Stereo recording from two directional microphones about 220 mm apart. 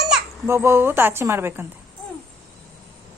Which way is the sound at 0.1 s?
10° right (ahead or behind).